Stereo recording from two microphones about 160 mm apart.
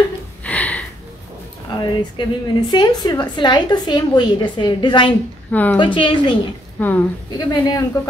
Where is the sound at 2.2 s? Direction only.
30° left (ahead or behind).